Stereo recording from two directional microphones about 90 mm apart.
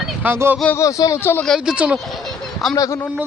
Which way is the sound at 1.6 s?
10° right (ahead or behind).